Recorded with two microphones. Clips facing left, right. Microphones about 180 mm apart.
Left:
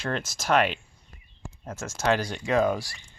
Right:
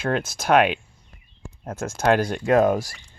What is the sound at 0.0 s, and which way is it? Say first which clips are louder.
Speech: right 6 dB; 55° right (ahead or behind).